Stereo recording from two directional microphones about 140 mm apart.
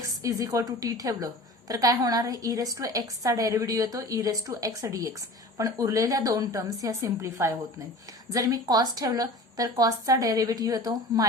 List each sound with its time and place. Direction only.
0.2 s a woman's voice: 25° right (ahead or behind)